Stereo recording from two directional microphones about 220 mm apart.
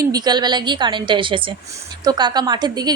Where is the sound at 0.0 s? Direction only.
15° right (ahead or behind).